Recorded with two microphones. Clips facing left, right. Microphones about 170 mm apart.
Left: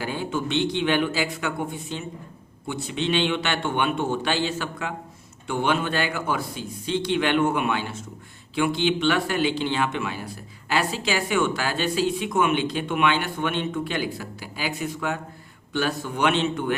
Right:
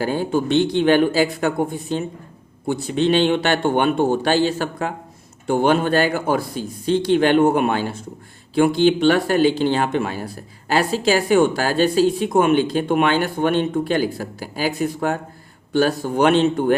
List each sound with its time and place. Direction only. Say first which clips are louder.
0.0 s speech: right 7 dB; 40° right (ahead or behind)